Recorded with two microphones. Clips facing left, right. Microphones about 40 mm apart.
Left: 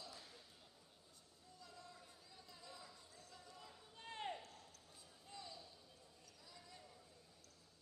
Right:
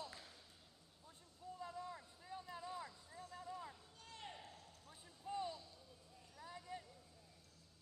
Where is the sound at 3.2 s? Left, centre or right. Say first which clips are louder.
Right 11 dB; right.